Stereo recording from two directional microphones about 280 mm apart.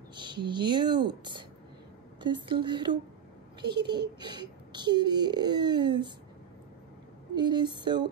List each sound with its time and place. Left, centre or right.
0.1 s a child's voice: centre
3.6 s a child's voice: right
3.9 s a child's voice: centre
7.3 s a child's voice: centre